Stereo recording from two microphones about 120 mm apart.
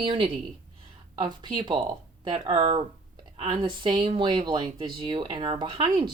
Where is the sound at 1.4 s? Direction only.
40° right (ahead or behind).